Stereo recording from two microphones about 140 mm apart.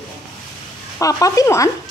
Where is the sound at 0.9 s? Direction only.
25° left (ahead or behind).